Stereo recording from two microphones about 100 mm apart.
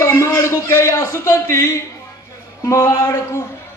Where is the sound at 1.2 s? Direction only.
30° left (ahead or behind).